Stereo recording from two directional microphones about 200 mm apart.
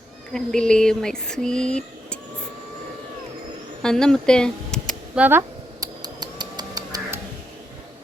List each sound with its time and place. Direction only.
0.3 s a sound: 5° left (ahead or behind)
3.8 s speech: 5° left (ahead or behind)
5.2 s cutlery: 10° right (ahead or behind)